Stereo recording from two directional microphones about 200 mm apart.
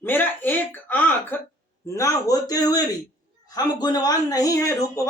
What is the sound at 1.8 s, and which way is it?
A man's voice, 15° left (ahead or behind).